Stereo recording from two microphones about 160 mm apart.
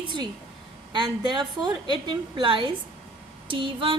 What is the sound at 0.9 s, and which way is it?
A woman's voice, 30° right (ahead or behind).